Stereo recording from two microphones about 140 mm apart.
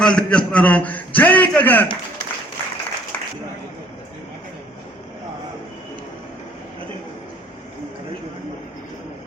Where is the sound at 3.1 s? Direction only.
10° left (ahead or behind).